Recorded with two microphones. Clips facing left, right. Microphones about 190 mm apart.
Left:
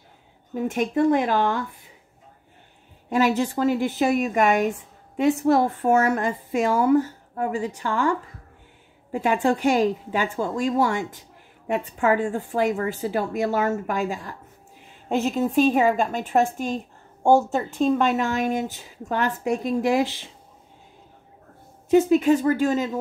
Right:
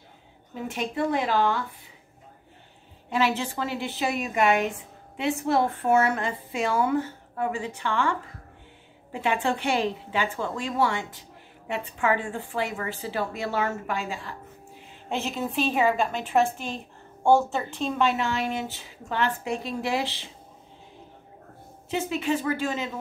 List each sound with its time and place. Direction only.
0.6 s a woman's voice: 45° left (ahead or behind)
3.1 s a woman's voice: 45° left (ahead or behind)
21.9 s a woman's voice: 45° left (ahead or behind)